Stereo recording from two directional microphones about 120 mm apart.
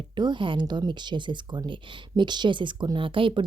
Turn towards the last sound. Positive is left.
turn(degrees=-45)  # may be behind; listen again after turning